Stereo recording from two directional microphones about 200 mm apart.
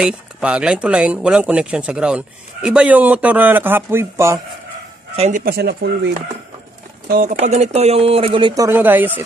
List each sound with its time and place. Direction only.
0.0 s speech: 5° right (ahead or behind)
5.1 s speech: 30° right (ahead or behind)
5.4 s speech: 50° right (ahead or behind); by 8.6 s 25° right (ahead or behind)
8.6 s speech: 10° right (ahead or behind)